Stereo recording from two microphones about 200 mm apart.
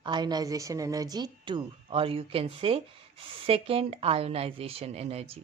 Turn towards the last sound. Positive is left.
turn(degrees=-30)  # may be behind; listen again after turning